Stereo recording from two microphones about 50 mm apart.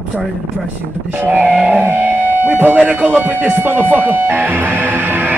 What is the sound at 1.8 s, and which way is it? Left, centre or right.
Music, right.